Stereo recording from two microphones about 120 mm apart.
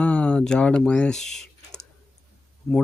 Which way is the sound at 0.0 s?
10° left (ahead or behind).